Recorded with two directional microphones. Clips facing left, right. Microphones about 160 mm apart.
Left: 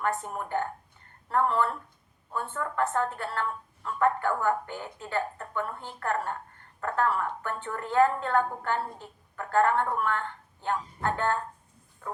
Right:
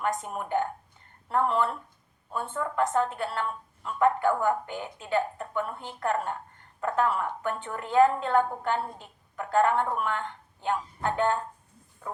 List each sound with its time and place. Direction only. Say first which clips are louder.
0.0 s a woman's voice: even; 15° right (ahead or behind)